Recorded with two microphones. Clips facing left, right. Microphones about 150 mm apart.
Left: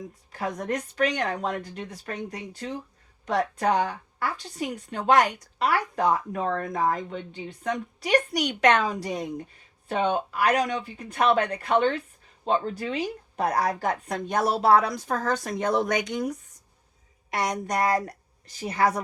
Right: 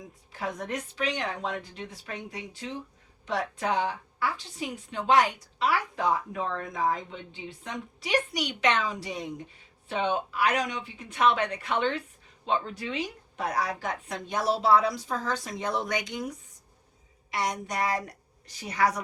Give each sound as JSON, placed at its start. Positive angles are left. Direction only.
{"t": 0.3, "sound": "a woman's voice", "side_deg": 45}
{"t": 9.0, "sound": "a woman's voice", "side_deg": 40}
{"t": 17.7, "sound": "a woman's voice", "side_deg": 45}
{"t": 18.6, "sound": "a woman's voice", "side_deg": 30}